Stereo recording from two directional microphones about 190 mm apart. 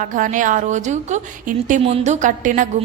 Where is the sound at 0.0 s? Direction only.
45° right (ahead or behind).